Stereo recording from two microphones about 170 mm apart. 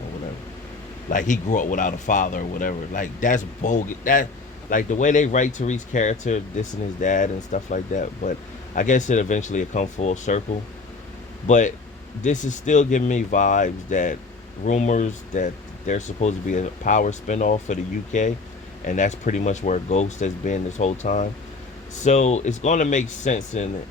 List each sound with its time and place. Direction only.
1.1 s speech: 50° left (ahead or behind)
11.4 s speech: 45° left (ahead or behind)